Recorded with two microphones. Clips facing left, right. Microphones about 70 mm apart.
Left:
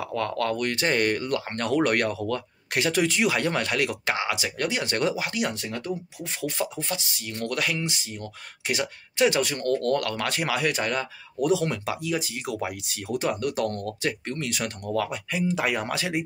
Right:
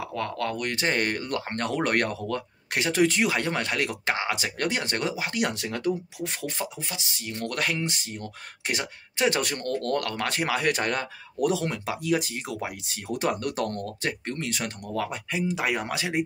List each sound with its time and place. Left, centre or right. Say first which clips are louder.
0.0 s speech: left 3 dB; centre; by 2.2 s right
2.2 s speech: left 1 dB; right
4.8 s speech: left 3 dB; right
5.5 s speech: right 3 dB; right
7.2 s speech: left 1 dB; right
7.5 s speech: even; right
10.7 s speech: right 1 dB; right
11.6 s speech: left 2 dB; right
12.0 s speech: right 3 dB; right
12.5 s speech: left 3 dB; right
13.2 s speech: even; right
15.4 s speech: left 2 dB; centre